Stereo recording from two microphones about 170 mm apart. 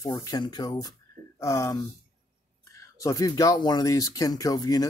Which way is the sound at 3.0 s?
20° left (ahead or behind).